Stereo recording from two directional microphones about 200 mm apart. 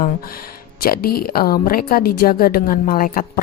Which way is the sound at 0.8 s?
50° left (ahead or behind).